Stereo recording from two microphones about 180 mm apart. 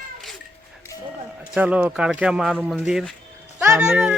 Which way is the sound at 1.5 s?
5° right (ahead or behind).